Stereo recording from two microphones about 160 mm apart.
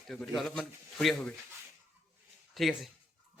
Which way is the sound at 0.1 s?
Centre (ahead or behind).